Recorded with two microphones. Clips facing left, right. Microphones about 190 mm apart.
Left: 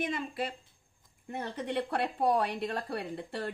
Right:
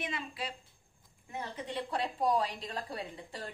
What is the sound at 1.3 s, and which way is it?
A woman's voice, 65° left (ahead or behind).